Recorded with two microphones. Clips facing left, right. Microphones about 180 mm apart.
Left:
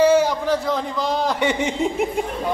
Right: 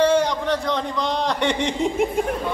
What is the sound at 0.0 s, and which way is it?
A man's voice, 5° left (ahead or behind).